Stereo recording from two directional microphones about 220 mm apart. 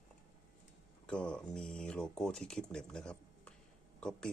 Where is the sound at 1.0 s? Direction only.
5° left (ahead or behind).